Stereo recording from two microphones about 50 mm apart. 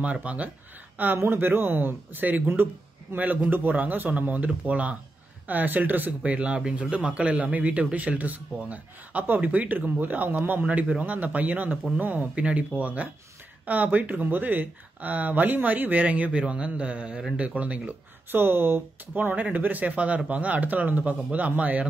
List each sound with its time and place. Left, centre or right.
0.0 s speech: right
0.9 s a man's voice: right
6.3 s a man's voice: right
18.3 s speech: right
19.1 s a man's voice: right